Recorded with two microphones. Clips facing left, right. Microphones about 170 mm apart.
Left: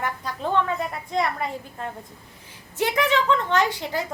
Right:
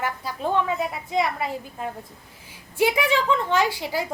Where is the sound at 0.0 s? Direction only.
10° right (ahead or behind).